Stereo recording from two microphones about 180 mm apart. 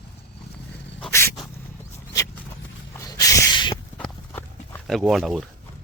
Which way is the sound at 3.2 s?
20° left (ahead or behind).